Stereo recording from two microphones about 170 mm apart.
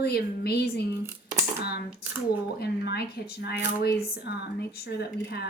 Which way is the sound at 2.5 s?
70° left (ahead or behind).